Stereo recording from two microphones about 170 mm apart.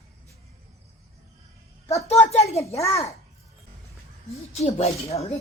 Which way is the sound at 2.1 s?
40° left (ahead or behind).